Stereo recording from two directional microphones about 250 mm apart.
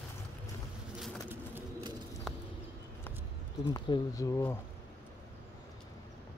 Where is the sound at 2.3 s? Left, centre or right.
Centre.